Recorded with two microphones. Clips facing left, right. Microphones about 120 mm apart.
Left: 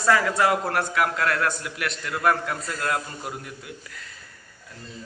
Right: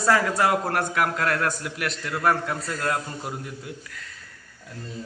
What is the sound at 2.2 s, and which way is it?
Speech, 25° right (ahead or behind).